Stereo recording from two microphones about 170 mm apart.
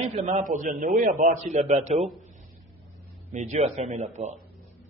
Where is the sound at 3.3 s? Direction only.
45° right (ahead or behind).